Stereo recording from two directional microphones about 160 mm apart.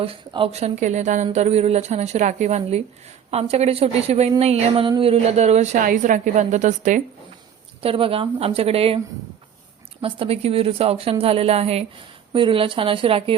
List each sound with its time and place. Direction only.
0.0 s a woman's voice: 35° right (ahead or behind)
7.8 s a woman's voice: 35° right (ahead or behind)
10.0 s a woman's voice: 35° right (ahead or behind)